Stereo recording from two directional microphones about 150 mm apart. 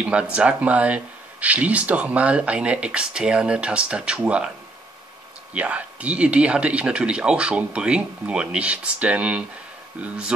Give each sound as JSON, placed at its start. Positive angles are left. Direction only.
{"t": 0.0, "sound": "speech", "side_deg": -10}
{"t": 5.5, "sound": "speech", "side_deg": -10}